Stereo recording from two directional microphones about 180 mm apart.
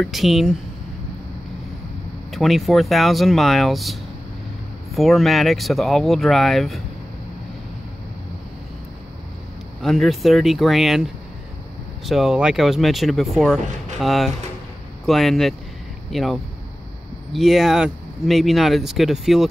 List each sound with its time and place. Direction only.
0.0 s speech: centre (ahead or behind)
2.3 s speech: centre (ahead or behind)
9.8 s speech: centre (ahead or behind)
12.1 s speech: centre (ahead or behind)